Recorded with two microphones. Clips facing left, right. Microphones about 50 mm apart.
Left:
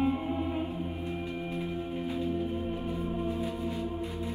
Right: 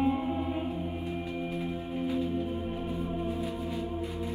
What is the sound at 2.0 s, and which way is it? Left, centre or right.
Music, left.